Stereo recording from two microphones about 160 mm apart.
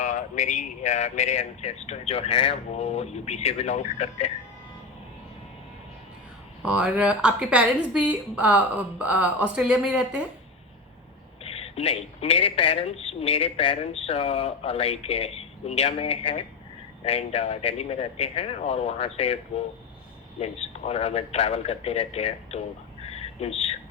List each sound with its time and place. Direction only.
0.0 s speech: 50° left (ahead or behind)
6.6 s speech: 5° right (ahead or behind)
11.4 s a man's voice: 40° left (ahead or behind)
20.4 s a man's voice: 40° left (ahead or behind)
23.0 s a sound: 40° left (ahead or behind)